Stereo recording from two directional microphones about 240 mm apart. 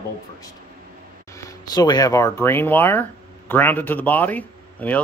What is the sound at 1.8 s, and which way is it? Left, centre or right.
Speech, centre.